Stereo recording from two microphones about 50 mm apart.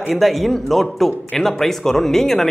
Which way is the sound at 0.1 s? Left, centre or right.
Centre.